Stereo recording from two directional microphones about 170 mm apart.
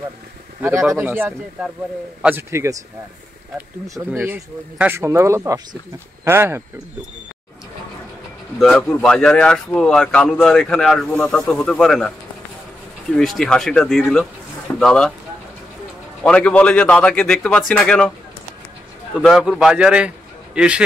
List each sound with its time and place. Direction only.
0.6 s speech: 15° right (ahead or behind)
8.5 s speech: centre (ahead or behind)
13.1 s speech: 5° left (ahead or behind)
16.3 s a man's voice: 10° left (ahead or behind)
19.1 s speech: 5° right (ahead or behind)